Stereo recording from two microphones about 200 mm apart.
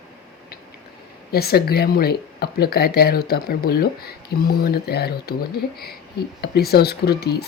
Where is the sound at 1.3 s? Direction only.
50° left (ahead or behind).